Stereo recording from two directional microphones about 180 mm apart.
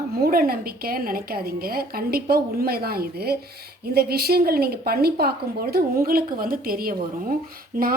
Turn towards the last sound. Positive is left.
turn(degrees=-50)  # may be behind; listen again after turning